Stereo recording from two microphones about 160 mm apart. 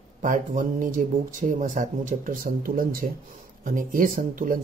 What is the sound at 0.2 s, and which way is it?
Speech, 55° right (ahead or behind).